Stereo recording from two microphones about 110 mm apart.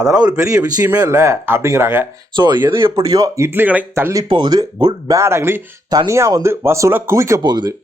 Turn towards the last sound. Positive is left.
turn(degrees=-40)  # may be behind; listen again after turning